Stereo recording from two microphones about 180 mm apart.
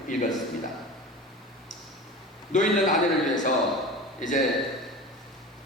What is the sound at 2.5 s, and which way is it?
A man's voice, 45° left (ahead or behind).